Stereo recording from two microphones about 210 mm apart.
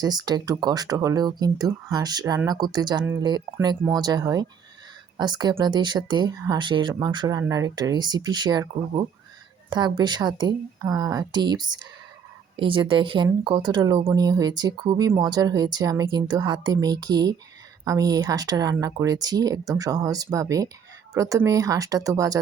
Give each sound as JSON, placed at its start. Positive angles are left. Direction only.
{"t": 0.0, "sound": "speech", "side_deg": -20}